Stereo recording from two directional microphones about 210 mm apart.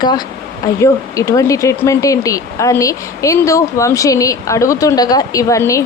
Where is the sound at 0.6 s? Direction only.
15° left (ahead or behind).